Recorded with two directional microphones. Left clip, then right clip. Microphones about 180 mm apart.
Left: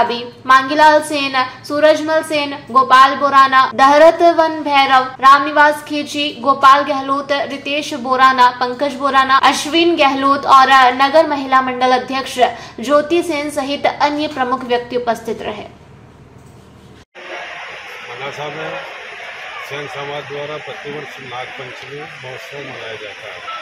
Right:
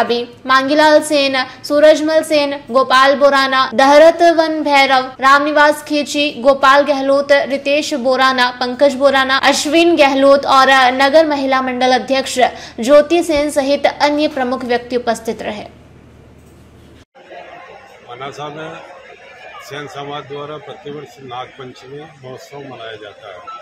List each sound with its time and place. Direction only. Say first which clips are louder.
0.0 s a woman's voice: right 1 dB; 35° right (ahead or behind)